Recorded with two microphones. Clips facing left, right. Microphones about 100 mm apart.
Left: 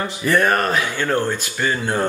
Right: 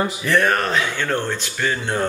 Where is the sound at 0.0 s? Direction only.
Centre (ahead or behind).